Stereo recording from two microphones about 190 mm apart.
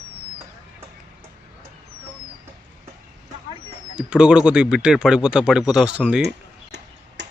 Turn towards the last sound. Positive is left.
turn(degrees=-70)  # may be behind; listen again after turning